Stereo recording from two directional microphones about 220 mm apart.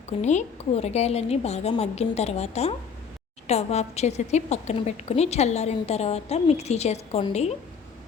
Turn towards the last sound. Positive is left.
turn(degrees=30)  # may be behind; listen again after turning